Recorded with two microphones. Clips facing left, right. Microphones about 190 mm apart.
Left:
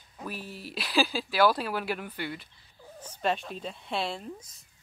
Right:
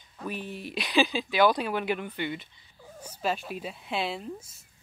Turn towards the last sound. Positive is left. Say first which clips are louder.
# right 1 dB
turn(degrees=0)  # may be behind; listen again after turning